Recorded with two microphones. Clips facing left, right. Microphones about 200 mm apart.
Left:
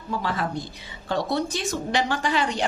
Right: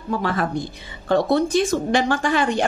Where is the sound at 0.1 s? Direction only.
55° right (ahead or behind).